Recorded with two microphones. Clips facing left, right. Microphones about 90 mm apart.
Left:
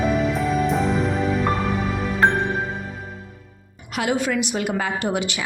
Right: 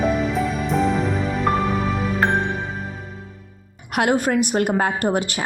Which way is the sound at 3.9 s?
55° right (ahead or behind).